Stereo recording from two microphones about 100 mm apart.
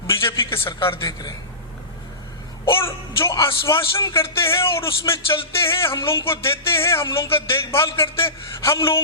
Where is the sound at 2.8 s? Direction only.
25° left (ahead or behind).